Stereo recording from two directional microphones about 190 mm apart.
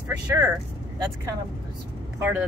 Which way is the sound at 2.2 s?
10° right (ahead or behind).